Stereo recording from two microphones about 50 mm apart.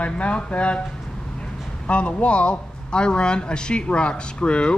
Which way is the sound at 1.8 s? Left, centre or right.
Left.